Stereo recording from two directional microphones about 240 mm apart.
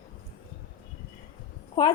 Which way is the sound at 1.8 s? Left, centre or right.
Centre.